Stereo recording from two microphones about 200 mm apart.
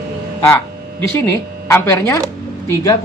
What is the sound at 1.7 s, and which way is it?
Speech, 10° left (ahead or behind).